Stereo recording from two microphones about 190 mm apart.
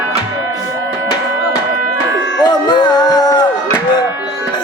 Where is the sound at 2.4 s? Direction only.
20° left (ahead or behind).